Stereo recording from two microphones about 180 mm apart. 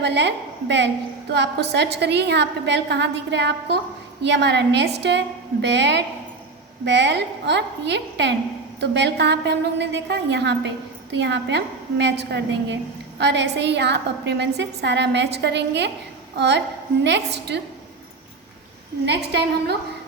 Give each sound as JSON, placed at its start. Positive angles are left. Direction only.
{"t": 0.0, "sound": "a woman's voice", "side_deg": -70}
{"t": 19.0, "sound": "a woman's voice", "side_deg": -65}